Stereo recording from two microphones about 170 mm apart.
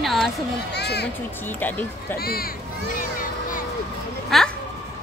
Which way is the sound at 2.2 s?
65° left (ahead or behind).